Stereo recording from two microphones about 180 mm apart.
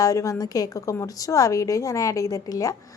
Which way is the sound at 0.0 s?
20° left (ahead or behind).